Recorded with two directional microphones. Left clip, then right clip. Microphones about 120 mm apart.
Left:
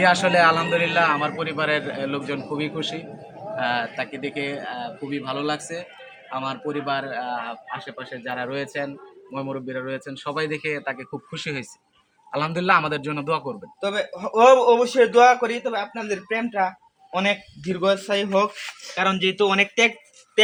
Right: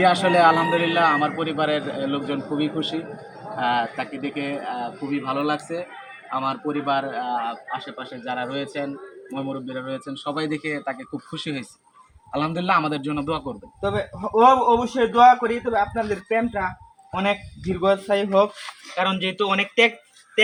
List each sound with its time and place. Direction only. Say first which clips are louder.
0.0 s a man's voice: even; 20° left (ahead or behind)
3.5 s a man's voice: right 2 dB; 10° left (ahead or behind); by 19.9 s 25° left (ahead or behind)